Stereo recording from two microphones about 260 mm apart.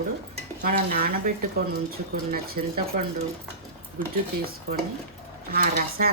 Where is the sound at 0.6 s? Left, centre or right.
Right.